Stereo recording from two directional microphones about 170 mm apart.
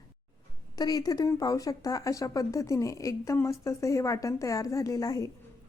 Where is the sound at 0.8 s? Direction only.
20° left (ahead or behind).